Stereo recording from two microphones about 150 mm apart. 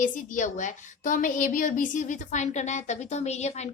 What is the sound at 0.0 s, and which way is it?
A woman's voice, 60° left (ahead or behind).